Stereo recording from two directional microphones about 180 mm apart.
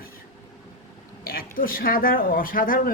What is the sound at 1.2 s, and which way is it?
Speech, 55° left (ahead or behind).